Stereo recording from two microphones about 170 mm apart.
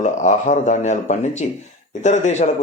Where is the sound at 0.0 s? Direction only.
45° left (ahead or behind).